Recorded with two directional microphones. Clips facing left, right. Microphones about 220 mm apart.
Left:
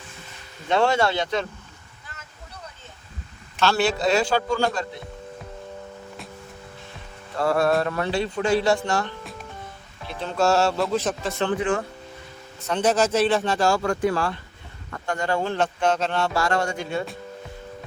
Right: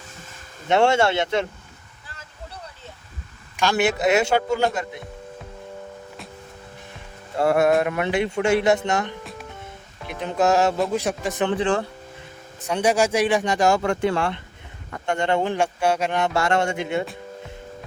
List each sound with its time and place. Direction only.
0.7 s speech: 25° right (ahead or behind)
3.6 s speech: 15° right (ahead or behind)
7.3 s speech: 20° right (ahead or behind)
11.5 s speech: 30° right (ahead or behind)
12.6 s speech: 10° right (ahead or behind)